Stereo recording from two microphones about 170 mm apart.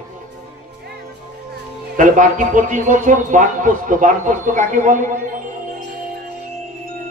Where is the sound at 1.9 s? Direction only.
50° right (ahead or behind).